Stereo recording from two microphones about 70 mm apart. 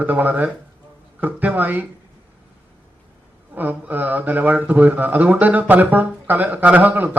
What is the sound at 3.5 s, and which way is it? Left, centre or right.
Speech, right.